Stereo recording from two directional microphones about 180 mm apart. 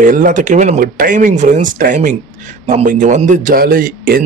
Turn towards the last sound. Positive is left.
turn(degrees=-55)  # may be behind; listen again after turning